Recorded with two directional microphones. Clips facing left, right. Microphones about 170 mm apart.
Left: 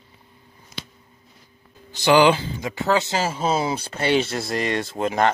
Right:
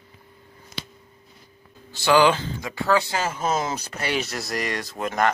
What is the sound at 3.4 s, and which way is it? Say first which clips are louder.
Speech: left 3 dB; 10° left (ahead or behind).